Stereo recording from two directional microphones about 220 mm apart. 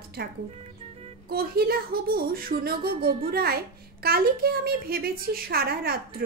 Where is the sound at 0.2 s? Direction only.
45° right (ahead or behind).